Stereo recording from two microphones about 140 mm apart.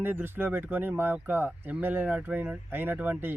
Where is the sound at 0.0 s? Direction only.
15° right (ahead or behind).